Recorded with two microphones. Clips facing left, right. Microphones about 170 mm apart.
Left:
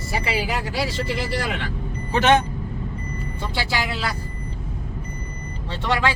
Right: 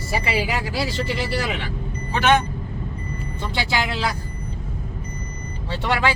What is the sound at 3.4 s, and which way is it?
Speech, 5° left (ahead or behind).